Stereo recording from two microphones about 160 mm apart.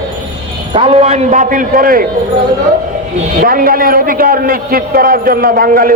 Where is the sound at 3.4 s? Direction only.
60° right (ahead or behind).